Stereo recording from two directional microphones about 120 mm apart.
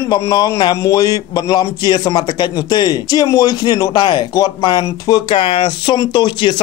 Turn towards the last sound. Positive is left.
turn(degrees=40)  # may be behind; listen again after turning